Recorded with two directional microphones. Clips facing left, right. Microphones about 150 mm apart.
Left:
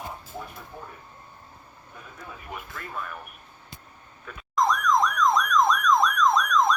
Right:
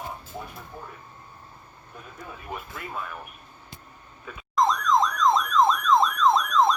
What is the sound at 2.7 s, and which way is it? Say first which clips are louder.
Speech: left 1 dB; 10° right (ahead or behind).